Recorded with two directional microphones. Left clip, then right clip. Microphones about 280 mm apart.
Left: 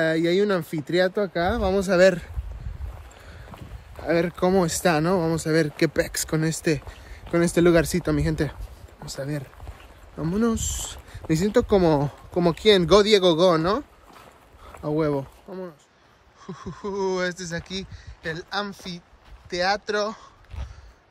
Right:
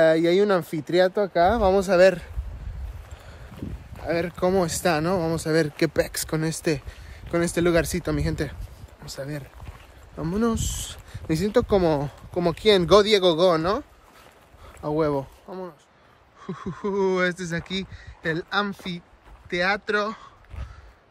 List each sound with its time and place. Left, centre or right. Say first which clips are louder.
0.0 s speech: right 3 dB; centre
4.0 s speech: left 2 dB; centre
16.4 s speech: right 3 dB; centre